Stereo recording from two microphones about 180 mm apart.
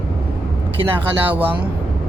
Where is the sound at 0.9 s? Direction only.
10° right (ahead or behind).